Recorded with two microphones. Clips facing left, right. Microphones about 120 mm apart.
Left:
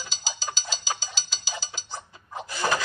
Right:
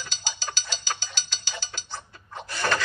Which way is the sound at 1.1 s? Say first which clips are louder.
Left 1 dB; 60° right (ahead or behind).